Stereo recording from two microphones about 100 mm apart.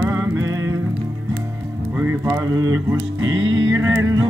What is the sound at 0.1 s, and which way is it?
Music, 35° right (ahead or behind).